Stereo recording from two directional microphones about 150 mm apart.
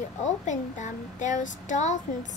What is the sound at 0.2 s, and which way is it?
Speech, 55° left (ahead or behind).